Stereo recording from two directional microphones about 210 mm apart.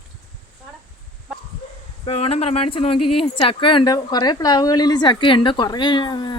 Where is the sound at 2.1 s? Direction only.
30° left (ahead or behind).